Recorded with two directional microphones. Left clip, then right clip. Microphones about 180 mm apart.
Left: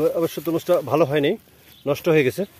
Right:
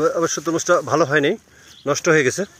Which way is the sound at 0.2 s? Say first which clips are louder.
Right 3 dB; 5° left (ahead or behind).